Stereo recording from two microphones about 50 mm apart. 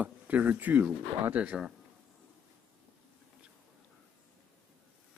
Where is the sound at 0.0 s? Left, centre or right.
Right.